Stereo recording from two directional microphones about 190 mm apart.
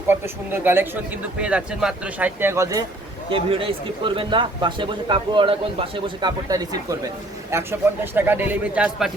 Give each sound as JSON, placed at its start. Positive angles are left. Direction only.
{"t": 0.1, "sound": "speech", "side_deg": -10}
{"t": 3.2, "sound": "speech", "side_deg": -30}